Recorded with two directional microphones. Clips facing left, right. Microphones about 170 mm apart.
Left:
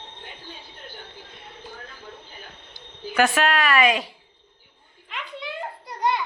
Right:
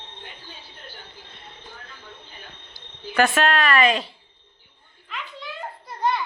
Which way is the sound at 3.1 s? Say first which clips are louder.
Right 1 dB; 5° left (ahead or behind).